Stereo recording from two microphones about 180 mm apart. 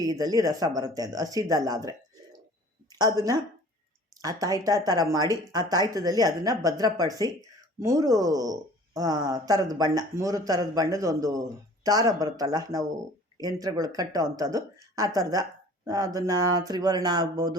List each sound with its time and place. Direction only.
0.0 s a woman's voice: 20° right (ahead or behind)